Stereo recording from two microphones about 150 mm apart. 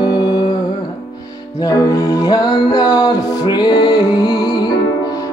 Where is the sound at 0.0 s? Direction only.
25° left (ahead or behind).